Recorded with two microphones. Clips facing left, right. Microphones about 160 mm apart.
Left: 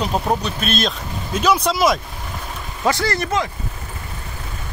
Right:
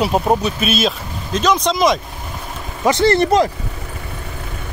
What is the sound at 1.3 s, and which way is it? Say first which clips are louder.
Speech: right 1 dB; 10° left (ahead or behind).